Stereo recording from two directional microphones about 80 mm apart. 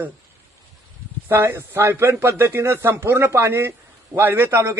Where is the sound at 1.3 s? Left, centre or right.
Right.